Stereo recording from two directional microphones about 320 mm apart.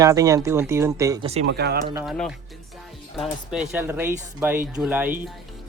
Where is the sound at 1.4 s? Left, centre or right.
Right.